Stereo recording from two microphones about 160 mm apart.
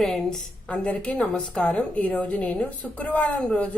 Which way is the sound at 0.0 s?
5° left (ahead or behind).